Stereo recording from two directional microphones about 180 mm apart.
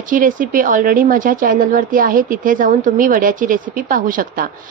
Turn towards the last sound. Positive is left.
turn(degrees=-50)  # may be behind; listen again after turning